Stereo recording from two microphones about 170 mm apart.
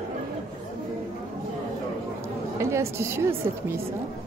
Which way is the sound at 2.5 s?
15° right (ahead or behind).